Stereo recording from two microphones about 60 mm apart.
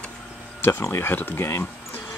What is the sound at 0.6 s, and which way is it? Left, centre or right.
Speech, left.